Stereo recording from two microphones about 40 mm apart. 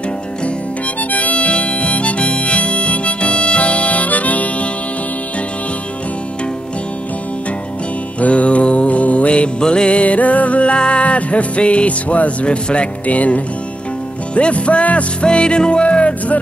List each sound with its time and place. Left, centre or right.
1.1 s harmonica: left
8.2 s music: left
9.6 s music: left
15.2 s music: left